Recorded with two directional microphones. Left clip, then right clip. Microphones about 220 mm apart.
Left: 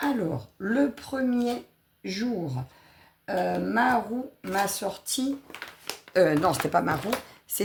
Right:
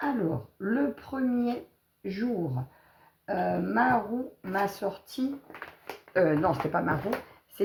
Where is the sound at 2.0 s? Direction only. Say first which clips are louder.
Left 1 dB; 30° left (ahead or behind).